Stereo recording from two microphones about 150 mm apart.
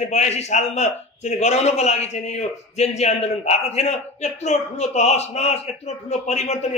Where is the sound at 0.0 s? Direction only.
50° left (ahead or behind).